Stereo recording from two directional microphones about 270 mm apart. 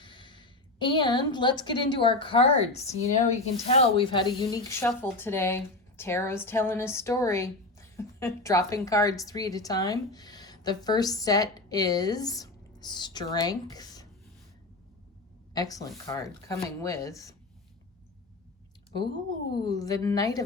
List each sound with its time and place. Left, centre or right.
0.0 s a woman's voice: centre
15.5 s speech: centre
18.9 s speech: centre